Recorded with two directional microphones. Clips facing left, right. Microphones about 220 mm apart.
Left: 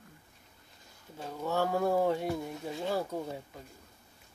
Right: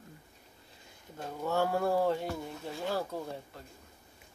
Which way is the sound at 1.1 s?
10° left (ahead or behind).